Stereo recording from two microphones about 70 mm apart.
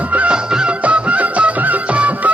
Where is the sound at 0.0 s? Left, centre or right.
Right.